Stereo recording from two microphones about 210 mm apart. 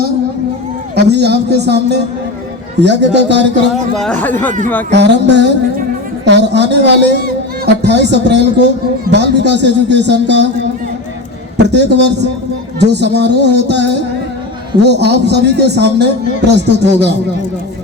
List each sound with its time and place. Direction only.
0.9 s a man's voice: 50° right (ahead or behind)
3.9 s speech: 5° left (ahead or behind)
4.9 s a man's voice: 55° right (ahead or behind)
11.5 s a man's voice: 55° right (ahead or behind)